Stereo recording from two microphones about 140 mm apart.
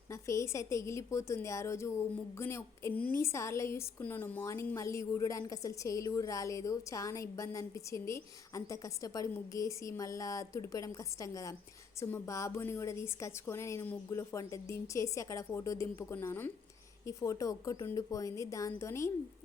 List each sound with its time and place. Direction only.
0.1 s a woman's voice: 20° left (ahead or behind)